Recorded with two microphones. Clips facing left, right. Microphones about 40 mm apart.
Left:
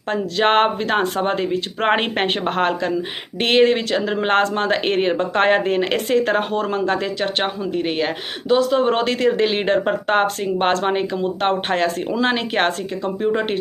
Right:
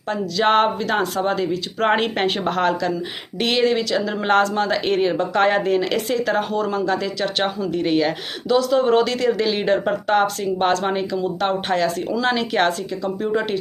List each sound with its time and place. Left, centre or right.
0.1 s speech: left